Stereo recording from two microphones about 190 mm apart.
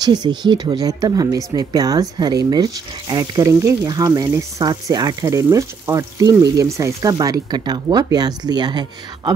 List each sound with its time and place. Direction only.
0.0 s speech: 20° right (ahead or behind)